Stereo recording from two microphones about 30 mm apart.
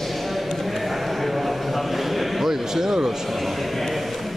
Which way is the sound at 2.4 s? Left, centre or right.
Centre.